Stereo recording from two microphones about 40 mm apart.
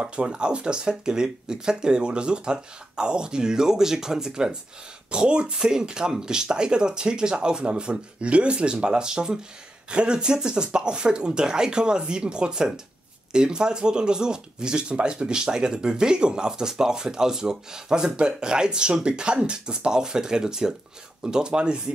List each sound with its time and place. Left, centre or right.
0.0 s speech: right